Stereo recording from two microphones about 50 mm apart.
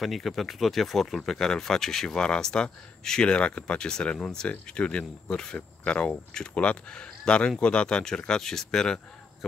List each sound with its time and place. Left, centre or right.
0.0 s speech: centre
9.4 s speech: centre